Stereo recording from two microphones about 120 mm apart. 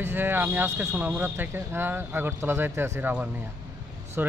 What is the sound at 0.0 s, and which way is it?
Speech, 15° right (ahead or behind).